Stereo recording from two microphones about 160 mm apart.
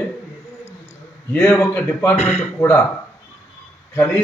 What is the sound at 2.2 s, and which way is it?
Speech, 40° left (ahead or behind).